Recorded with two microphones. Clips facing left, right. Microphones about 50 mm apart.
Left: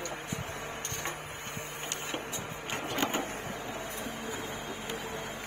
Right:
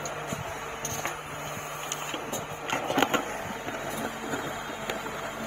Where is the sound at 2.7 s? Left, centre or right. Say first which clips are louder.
Right 7 dB; right.